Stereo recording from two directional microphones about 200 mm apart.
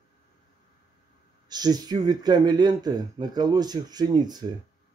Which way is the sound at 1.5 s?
20° right (ahead or behind).